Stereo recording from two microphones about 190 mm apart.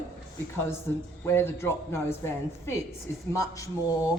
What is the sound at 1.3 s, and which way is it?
A man's voice, 10° left (ahead or behind).